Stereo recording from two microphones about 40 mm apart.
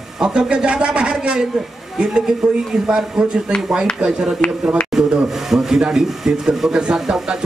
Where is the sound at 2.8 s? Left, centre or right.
Centre.